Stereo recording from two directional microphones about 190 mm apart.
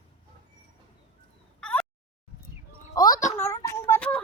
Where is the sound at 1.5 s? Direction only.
5° left (ahead or behind).